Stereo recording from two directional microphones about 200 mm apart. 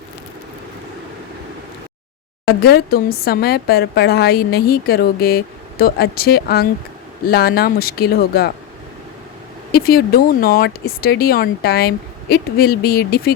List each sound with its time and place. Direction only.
2.4 s speech: 50° left (ahead or behind)
9.7 s speech: 50° left (ahead or behind)